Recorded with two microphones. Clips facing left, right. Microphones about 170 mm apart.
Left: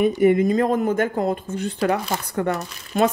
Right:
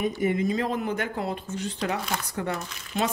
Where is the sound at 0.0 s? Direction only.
60° left (ahead or behind).